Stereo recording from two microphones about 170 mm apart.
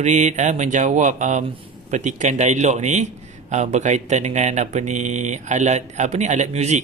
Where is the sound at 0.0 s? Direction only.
45° right (ahead or behind).